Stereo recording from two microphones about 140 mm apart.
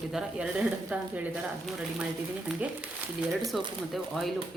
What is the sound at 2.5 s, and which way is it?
Speech, 5° right (ahead or behind).